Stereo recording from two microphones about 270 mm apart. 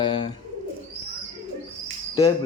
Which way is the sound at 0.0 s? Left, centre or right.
Centre.